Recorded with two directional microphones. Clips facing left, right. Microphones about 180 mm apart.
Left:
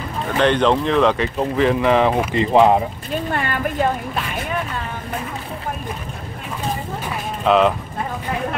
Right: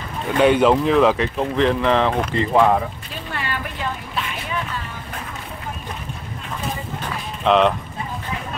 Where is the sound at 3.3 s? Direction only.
50° left (ahead or behind).